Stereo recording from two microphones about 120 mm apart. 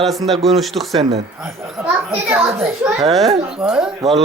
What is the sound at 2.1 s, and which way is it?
Speech, 15° right (ahead or behind).